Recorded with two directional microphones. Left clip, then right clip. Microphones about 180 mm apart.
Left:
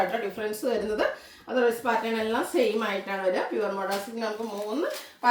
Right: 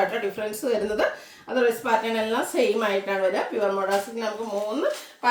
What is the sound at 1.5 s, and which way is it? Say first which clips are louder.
A woman's voice: right 3 dB; 15° right (ahead or behind).